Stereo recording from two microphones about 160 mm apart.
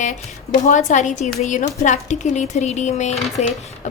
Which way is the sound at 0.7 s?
50° left (ahead or behind).